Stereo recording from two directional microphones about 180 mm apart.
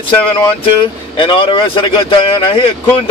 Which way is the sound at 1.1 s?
30° left (ahead or behind).